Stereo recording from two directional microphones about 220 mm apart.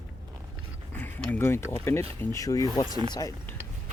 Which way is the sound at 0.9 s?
5° left (ahead or behind).